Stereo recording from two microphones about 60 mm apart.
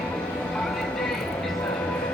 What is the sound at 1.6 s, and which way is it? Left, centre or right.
Train, left.